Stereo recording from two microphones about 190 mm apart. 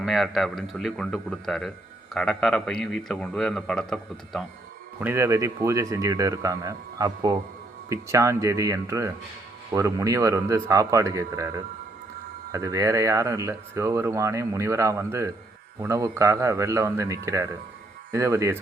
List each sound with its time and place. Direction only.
0.0 s speech: centre (ahead or behind)
4.9 s speech: 10° right (ahead or behind)